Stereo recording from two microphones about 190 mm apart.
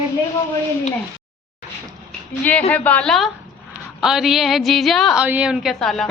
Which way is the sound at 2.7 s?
10° left (ahead or behind).